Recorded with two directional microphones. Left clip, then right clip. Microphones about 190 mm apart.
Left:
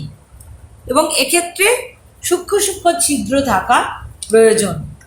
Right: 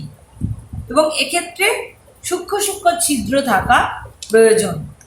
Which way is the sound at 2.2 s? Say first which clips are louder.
Left 4 dB; 30° left (ahead or behind).